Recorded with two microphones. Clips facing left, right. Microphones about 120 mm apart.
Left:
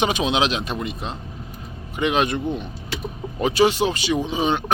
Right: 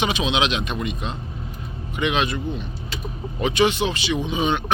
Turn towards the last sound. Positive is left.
turn(degrees=35)  # may be behind; listen again after turning